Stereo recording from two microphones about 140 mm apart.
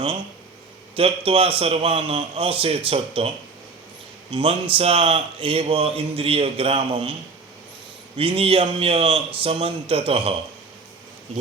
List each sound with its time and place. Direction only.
0.9 s a man's voice: 45° right (ahead or behind)
8.1 s speech: 40° right (ahead or behind)